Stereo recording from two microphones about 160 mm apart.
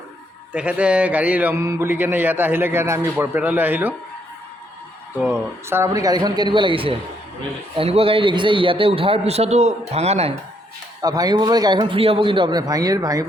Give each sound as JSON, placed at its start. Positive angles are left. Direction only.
{"t": 0.5, "sound": "speech", "side_deg": -10}
{"t": 5.6, "sound": "a man's voice", "side_deg": -15}
{"t": 11.0, "sound": "a man's voice", "side_deg": -25}
{"t": 11.8, "sound": "a man's voice", "side_deg": -35}